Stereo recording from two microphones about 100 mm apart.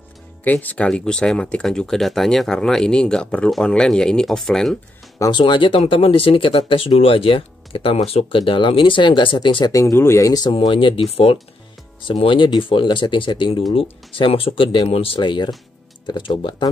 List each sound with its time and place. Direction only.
0.4 s speech: 15° left (ahead or behind)
5.3 s speech: 55° left (ahead or behind)
9.7 s speech: 30° left (ahead or behind)
10.7 s speech: 60° left (ahead or behind)
12.0 s speech: 55° left (ahead or behind)
14.9 s speech: 70° left (ahead or behind)
15.1 s speech: 50° left (ahead or behind)